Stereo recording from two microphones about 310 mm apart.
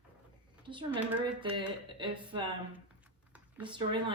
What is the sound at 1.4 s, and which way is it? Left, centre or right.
Speech, centre.